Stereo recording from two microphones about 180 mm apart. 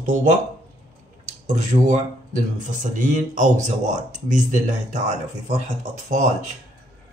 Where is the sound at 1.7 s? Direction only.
35° right (ahead or behind).